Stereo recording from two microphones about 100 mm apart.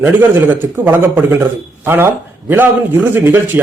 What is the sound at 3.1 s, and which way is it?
Speech, 20° right (ahead or behind).